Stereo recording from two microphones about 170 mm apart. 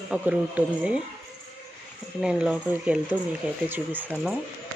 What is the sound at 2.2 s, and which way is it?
Speech, 5° right (ahead or behind).